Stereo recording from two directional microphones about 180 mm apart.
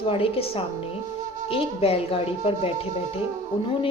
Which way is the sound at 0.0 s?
30° left (ahead or behind).